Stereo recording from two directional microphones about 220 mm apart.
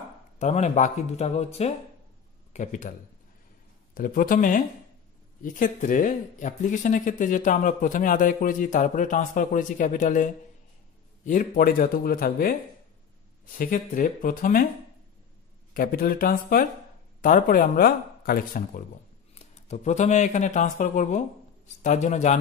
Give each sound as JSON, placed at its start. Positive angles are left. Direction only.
{"t": 0.4, "sound": "speech", "side_deg": 30}
{"t": 3.9, "sound": "speech", "side_deg": 40}
{"t": 15.7, "sound": "speech", "side_deg": 40}